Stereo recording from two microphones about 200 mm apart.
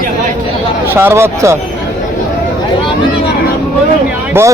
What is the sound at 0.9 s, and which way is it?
Speech, 10° right (ahead or behind).